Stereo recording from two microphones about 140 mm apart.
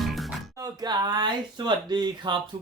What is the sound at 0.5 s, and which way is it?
Speech, 25° right (ahead or behind).